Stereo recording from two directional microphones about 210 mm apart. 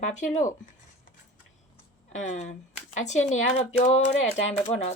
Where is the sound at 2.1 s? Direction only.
35° left (ahead or behind).